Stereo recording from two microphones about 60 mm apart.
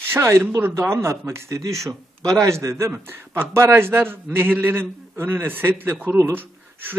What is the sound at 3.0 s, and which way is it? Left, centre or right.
A man's voice, right.